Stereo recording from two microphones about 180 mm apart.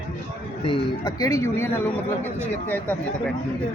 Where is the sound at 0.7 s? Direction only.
20° left (ahead or behind).